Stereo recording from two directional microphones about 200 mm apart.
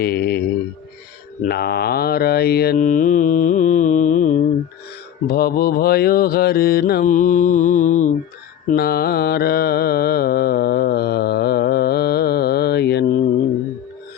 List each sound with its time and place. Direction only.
0.0 s a sound: 55° left (ahead or behind)
1.4 s mantra: 50° left (ahead or behind)
8.7 s mantra: 50° left (ahead or behind)